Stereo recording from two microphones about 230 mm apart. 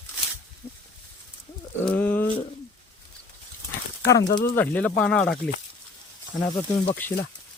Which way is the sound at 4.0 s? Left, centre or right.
Centre.